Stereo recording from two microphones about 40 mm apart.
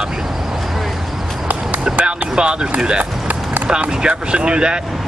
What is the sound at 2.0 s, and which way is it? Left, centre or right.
Speech, right.